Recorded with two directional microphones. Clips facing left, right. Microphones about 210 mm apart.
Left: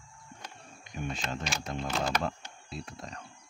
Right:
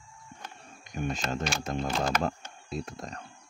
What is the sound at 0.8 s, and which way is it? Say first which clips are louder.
Speech: right 4 dB; 45° right (ahead or behind).